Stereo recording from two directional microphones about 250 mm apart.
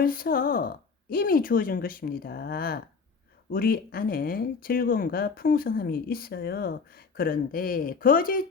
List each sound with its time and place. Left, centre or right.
0.0 s speech: left